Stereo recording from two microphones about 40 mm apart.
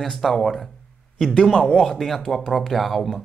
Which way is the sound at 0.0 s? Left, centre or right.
Centre.